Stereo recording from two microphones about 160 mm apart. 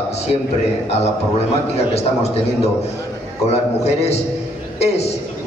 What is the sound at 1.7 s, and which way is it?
Speech, 40° left (ahead or behind).